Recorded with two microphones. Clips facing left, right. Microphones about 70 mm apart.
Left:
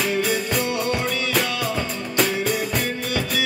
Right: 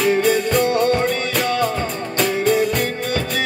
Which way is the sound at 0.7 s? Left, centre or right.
Right.